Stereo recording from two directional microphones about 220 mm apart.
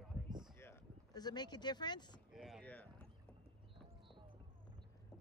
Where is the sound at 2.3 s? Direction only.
Centre (ahead or behind).